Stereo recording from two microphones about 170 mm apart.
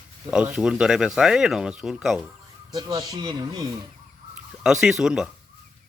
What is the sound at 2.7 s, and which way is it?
Speech, 25° right (ahead or behind).